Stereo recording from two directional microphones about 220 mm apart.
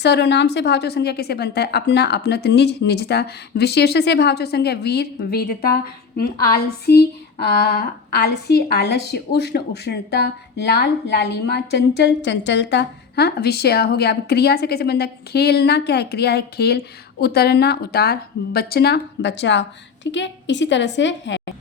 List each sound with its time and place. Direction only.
0.0 s speech: 50° left (ahead or behind)
6.9 s a woman's voice: 45° left (ahead or behind)